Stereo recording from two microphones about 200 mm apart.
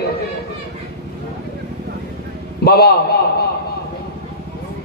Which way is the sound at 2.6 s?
50° left (ahead or behind).